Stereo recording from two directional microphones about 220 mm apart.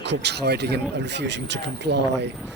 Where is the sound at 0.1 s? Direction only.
50° right (ahead or behind).